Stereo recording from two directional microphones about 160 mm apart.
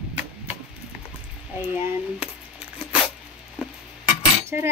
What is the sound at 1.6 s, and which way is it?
Speech, 10° right (ahead or behind).